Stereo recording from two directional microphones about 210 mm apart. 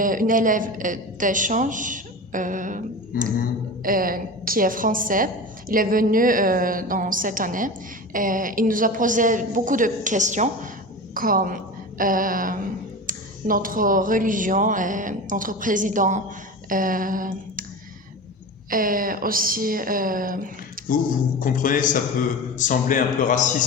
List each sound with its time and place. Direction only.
0.0 s a woman's voice: 40° right (ahead or behind)
16.6 s a sound: 40° right (ahead or behind)
18.7 s a woman's voice: 40° right (ahead or behind)
20.9 s a man's voice: 40° left (ahead or behind)